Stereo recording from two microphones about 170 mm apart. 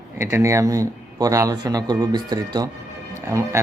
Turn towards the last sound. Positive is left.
turn(degrees=-15)  # may be behind; listen again after turning